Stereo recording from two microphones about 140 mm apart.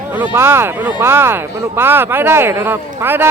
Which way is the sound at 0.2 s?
15° right (ahead or behind).